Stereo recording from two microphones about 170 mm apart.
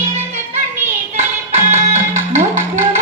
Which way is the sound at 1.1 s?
40° right (ahead or behind).